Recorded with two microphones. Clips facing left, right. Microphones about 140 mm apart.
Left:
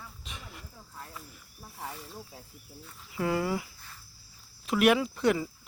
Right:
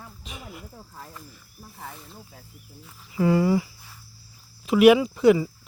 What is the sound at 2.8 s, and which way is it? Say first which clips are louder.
Speech: right 8 dB; centre (ahead or behind).